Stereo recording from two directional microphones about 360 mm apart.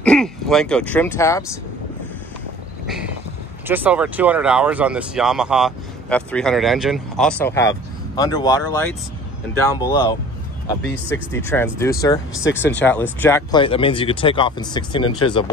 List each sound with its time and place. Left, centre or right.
0.0 s speech: centre
3.6 s speech: centre
11.3 s speech: centre
12.4 s speech: left
12.7 s speech: centre